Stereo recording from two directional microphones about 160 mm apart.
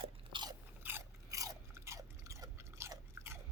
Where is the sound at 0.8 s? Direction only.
15° right (ahead or behind).